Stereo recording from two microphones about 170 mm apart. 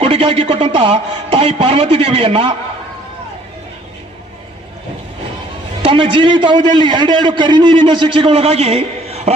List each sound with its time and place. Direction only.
0.0 s a man's voice: 35° right (ahead or behind)
5.8 s a man's voice: 30° right (ahead or behind)